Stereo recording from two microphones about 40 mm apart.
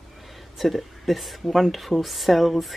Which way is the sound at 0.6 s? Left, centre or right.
Centre.